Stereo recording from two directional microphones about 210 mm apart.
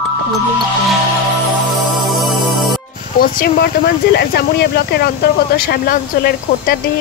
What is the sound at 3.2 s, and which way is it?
Speech, 45° left (ahead or behind).